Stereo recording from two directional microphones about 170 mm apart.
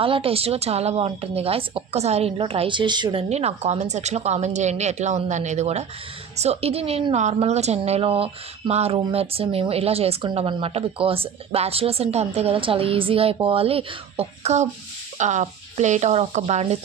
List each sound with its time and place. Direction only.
0.0 s a woman's voice: 35° right (ahead or behind)